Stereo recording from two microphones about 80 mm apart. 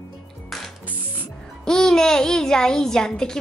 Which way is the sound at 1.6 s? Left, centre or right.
Centre.